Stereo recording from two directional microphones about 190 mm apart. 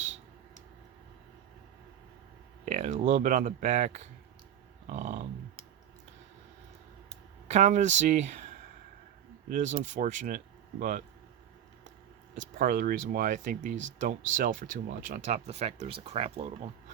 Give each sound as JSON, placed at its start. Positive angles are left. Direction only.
{"t": 2.6, "sound": "speech", "side_deg": -40}
{"t": 7.4, "sound": "speech", "side_deg": -40}
{"t": 12.5, "sound": "speech", "side_deg": -50}